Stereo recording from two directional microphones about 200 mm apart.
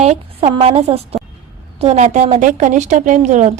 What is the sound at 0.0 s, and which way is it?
A woman's voice, 30° right (ahead or behind).